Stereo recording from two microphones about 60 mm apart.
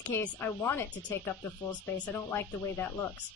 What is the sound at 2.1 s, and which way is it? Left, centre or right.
Speech, left.